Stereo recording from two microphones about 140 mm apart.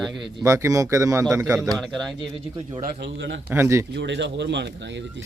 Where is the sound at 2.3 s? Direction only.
40° right (ahead or behind).